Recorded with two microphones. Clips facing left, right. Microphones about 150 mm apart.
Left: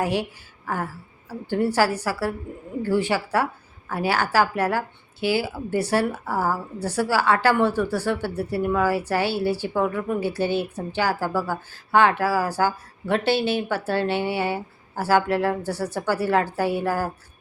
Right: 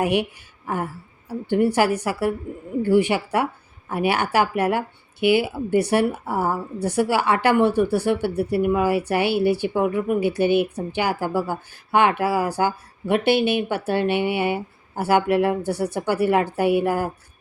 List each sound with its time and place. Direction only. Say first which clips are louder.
0.0 s a woman's voice: right 3 dB; 20° right (ahead or behind)
1.3 s a woman's voice: right 4 dB; 15° right (ahead or behind)